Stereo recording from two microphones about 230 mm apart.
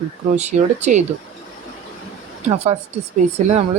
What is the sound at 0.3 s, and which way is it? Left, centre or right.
Speech, right.